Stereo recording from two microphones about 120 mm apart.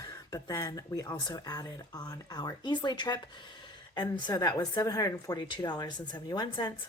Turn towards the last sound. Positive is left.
turn(degrees=35)  # may be behind; listen again after turning